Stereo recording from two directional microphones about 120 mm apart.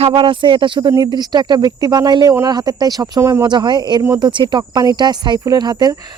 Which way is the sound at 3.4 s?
40° right (ahead or behind).